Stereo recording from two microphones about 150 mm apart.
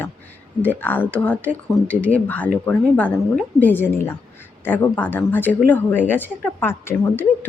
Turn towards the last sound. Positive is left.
turn(degrees=15)  # may be behind; listen again after turning